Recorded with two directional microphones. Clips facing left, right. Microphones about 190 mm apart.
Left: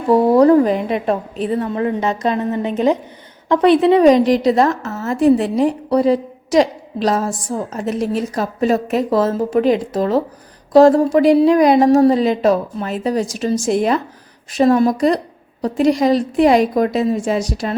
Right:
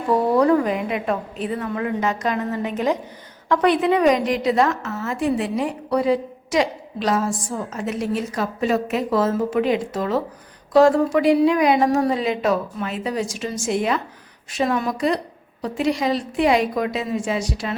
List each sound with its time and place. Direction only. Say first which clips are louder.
0.1 s a woman's voice: left 6 dB; 35° left (ahead or behind)